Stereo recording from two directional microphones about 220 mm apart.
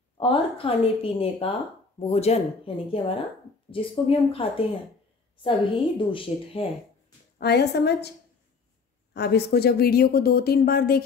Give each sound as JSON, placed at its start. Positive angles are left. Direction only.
{"t": 0.2, "sound": "speech", "side_deg": 25}
{"t": 5.9, "sound": "speech", "side_deg": 25}
{"t": 7.3, "sound": "speech", "side_deg": 50}
{"t": 9.1, "sound": "speech", "side_deg": 45}